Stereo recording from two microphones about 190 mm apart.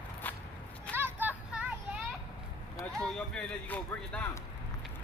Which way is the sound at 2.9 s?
5° left (ahead or behind).